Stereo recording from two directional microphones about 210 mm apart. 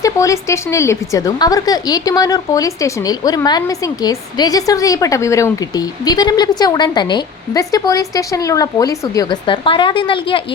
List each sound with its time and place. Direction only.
0.0 s a woman's voice: 15° left (ahead or behind)